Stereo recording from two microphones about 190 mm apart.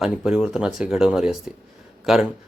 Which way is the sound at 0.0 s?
5° right (ahead or behind).